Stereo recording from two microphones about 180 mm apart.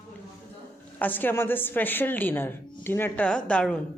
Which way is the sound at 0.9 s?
10° left (ahead or behind).